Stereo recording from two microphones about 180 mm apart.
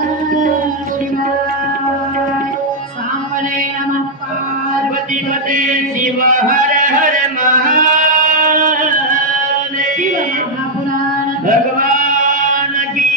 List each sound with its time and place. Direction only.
6.2 s a sound: 50° right (ahead or behind)
7.7 s music: 45° right (ahead or behind)
11.4 s male singing: 50° right (ahead or behind)